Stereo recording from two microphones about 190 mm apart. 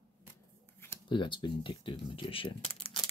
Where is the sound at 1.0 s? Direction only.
25° left (ahead or behind).